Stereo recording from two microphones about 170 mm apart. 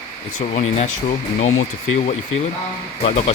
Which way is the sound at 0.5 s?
40° left (ahead or behind).